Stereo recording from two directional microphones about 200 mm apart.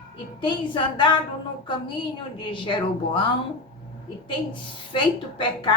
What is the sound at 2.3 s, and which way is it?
A woman's voice, 25° left (ahead or behind).